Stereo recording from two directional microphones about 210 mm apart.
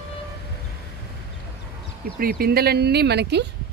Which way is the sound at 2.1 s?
45° right (ahead or behind).